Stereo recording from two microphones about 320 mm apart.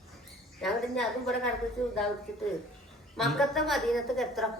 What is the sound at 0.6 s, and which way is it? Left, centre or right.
Speech, centre.